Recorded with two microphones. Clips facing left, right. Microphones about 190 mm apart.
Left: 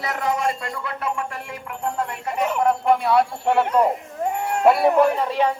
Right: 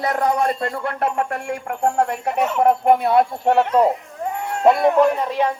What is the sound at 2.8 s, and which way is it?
Music, 50° right (ahead or behind).